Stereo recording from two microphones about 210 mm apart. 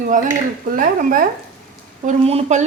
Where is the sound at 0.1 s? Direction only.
40° right (ahead or behind).